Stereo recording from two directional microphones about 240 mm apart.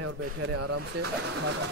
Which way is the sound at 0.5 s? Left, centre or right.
Right.